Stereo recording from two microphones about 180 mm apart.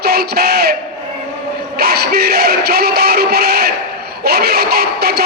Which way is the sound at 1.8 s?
60° right (ahead or behind).